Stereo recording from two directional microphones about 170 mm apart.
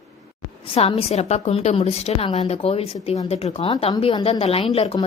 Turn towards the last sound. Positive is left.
turn(degrees=35)  # may be behind; listen again after turning